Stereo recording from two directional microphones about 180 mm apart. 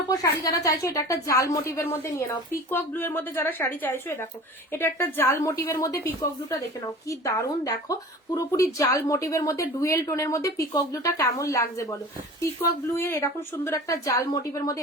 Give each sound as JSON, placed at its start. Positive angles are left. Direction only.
{"t": 0.1, "sound": "a woman's voice", "side_deg": 20}